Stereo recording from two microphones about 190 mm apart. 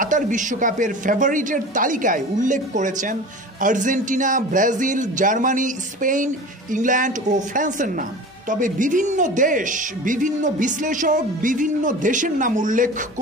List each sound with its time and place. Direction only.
0.0 s speech: 40° right (ahead or behind)